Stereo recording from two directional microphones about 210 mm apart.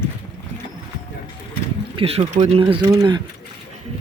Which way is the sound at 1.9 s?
25° right (ahead or behind).